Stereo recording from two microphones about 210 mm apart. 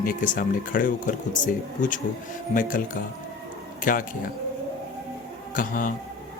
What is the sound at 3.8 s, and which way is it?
Speech, 40° left (ahead or behind).